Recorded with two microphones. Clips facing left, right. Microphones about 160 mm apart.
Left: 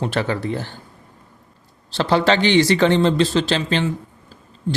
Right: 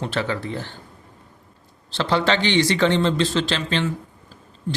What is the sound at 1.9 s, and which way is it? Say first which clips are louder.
Speech: left 4 dB; 40° left (ahead or behind).